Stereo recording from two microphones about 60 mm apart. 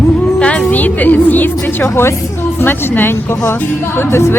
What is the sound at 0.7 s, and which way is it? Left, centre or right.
A woman's voice, left.